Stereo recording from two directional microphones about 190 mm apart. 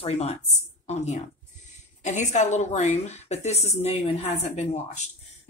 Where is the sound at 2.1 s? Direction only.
40° left (ahead or behind).